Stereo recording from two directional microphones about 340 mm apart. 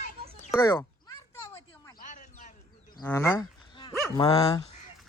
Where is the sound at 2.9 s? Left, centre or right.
Centre.